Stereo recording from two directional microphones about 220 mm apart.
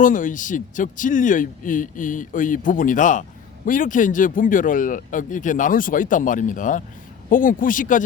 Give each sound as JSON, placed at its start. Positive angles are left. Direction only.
{"t": 0.0, "sound": "speech", "side_deg": 35}